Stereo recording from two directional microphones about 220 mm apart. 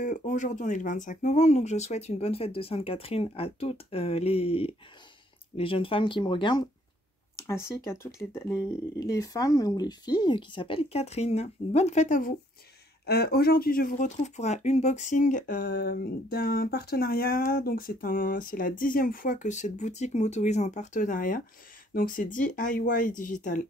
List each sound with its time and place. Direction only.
0.0 s speech: 35° left (ahead or behind)